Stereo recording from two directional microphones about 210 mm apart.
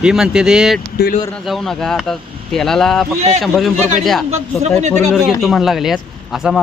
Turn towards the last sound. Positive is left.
turn(degrees=0)  # may be behind; listen again after turning